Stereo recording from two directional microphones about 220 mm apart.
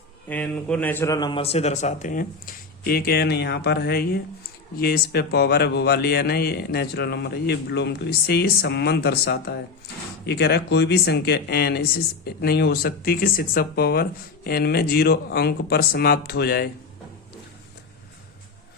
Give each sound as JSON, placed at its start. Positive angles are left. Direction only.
{"t": 0.3, "sound": "a man's voice", "side_deg": 5}